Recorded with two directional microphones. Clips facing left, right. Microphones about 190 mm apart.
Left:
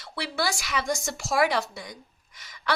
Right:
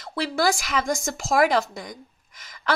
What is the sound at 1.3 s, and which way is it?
Speech, 45° right (ahead or behind).